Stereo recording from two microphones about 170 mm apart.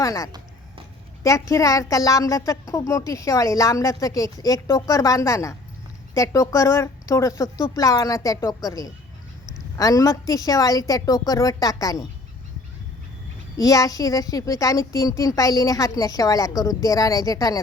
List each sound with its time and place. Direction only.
0.0 s a woman's voice: 20° left (ahead or behind)
13.6 s a woman's voice: 20° left (ahead or behind)